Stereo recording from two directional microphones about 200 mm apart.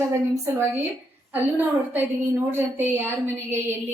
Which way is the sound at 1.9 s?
10° right (ahead or behind).